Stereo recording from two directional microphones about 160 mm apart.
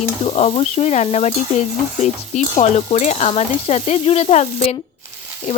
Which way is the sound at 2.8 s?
40° left (ahead or behind).